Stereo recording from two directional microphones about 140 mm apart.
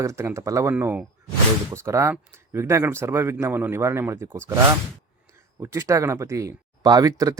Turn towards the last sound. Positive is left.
turn(degrees=-25)  # may be behind; listen again after turning